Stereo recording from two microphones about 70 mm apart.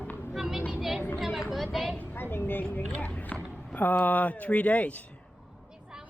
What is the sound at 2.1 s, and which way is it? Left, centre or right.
A woman's voice, left.